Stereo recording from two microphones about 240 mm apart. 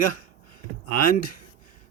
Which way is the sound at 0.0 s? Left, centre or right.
Left.